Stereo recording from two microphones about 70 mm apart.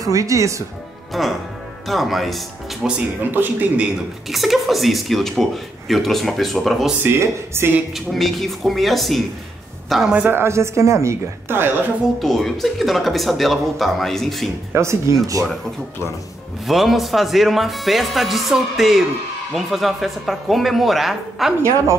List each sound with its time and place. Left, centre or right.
0.0 s speech: right
1.1 s speech: centre
3.3 s a man's voice: right
4.3 s speech: centre
7.0 s speech: right
7.9 s speech: centre
10.3 s speech: right
12.2 s speech: centre
14.7 s speech: right
16.6 s speech: centre